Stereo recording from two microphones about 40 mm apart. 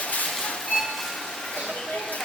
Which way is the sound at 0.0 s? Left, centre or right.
Left.